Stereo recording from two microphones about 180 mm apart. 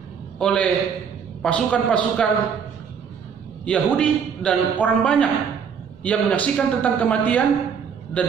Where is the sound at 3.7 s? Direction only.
5° left (ahead or behind).